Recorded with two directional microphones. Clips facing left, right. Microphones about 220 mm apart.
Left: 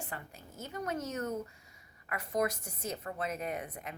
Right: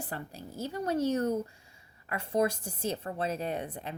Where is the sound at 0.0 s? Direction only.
35° right (ahead or behind).